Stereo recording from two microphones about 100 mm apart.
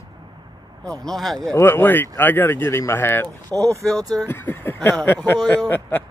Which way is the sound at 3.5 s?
35° right (ahead or behind).